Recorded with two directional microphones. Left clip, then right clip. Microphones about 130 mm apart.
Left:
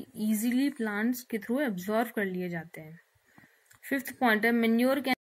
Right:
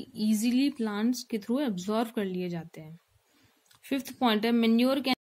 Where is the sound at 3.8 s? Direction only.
10° right (ahead or behind).